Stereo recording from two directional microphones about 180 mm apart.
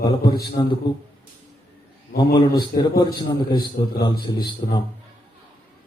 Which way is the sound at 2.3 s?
20° left (ahead or behind).